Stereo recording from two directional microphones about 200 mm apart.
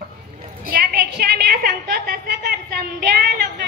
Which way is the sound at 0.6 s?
50° right (ahead or behind).